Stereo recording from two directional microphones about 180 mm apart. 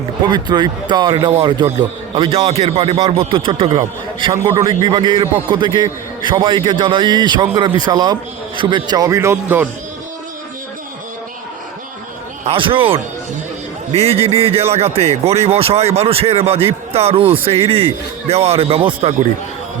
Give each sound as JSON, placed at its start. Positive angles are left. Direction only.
{"t": 0.3, "sound": "a man's voice", "side_deg": -25}
{"t": 12.5, "sound": "a man's voice", "side_deg": -30}